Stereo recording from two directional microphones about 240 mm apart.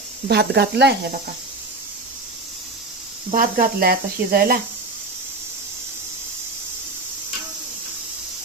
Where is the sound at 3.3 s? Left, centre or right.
Right.